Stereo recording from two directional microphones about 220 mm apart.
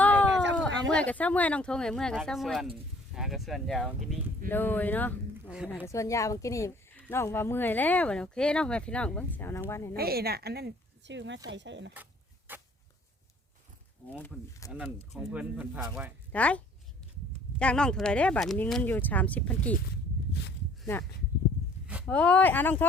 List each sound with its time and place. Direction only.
0.0 s a sound: 5° left (ahead or behind)
0.5 s a woman's voice: 5° left (ahead or behind)
9.9 s speech: 45° right (ahead or behind)
12.5 s a sound: 10° right (ahead or behind)
14.6 s a woman's voice: 15° left (ahead or behind)
15.1 s speech: 5° right (ahead or behind)
16.3 s a woman's voice: 5° left (ahead or behind)
17.6 s speech: 5° left (ahead or behind)
21.8 s a sound: 5° right (ahead or behind)
22.1 s a woman's voice: 5° left (ahead or behind)